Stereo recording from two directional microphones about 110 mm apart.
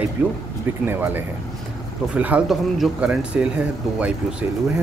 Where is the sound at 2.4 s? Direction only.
Centre (ahead or behind).